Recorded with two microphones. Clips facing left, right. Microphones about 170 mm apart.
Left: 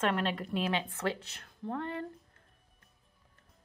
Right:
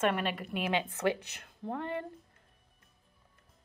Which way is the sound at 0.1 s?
10° right (ahead or behind).